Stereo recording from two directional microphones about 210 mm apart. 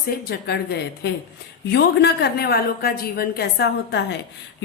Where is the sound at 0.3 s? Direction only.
50° left (ahead or behind).